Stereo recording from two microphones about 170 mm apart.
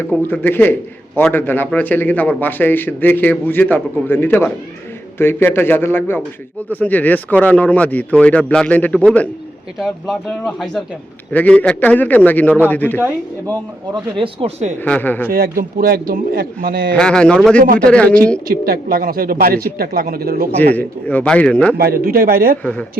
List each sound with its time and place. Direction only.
0.1 s a man's voice: 10° left (ahead or behind)
13.9 s speech: 30° right (ahead or behind)
14.8 s a man's voice: 10° left (ahead or behind)
15.3 s speech: 60° right (ahead or behind)
16.9 s a man's voice: 5° left (ahead or behind)
18.4 s speech: 60° right (ahead or behind)
20.7 s a man's voice: 10° left (ahead or behind)
21.8 s speech: 65° right (ahead or behind)
22.6 s a man's voice: 10° left (ahead or behind)